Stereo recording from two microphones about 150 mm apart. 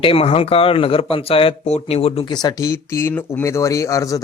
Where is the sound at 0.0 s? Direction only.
40° left (ahead or behind).